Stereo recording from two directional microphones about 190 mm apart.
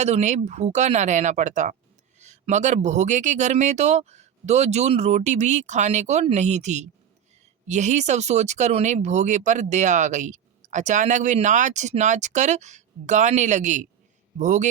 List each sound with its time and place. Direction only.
0.0 s speech: 35° right (ahead or behind)